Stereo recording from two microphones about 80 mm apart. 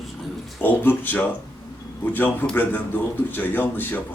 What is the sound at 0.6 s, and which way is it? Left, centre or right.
Speech, left.